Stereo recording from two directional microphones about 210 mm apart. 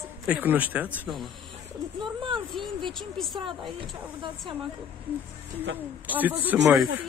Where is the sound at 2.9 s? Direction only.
Centre (ahead or behind).